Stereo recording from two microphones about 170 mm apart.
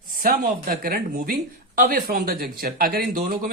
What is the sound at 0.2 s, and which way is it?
Speech, 60° right (ahead or behind).